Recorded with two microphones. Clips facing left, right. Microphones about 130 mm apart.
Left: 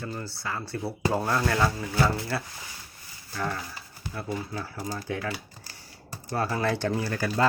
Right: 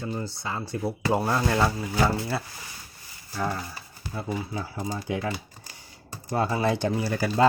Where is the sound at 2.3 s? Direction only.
20° right (ahead or behind).